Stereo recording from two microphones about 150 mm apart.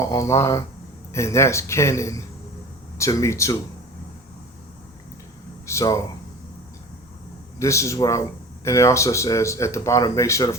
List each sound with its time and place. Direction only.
0.0 s speech: 20° left (ahead or behind)
5.6 s speech: 20° left (ahead or behind)
7.6 s speech: 20° left (ahead or behind)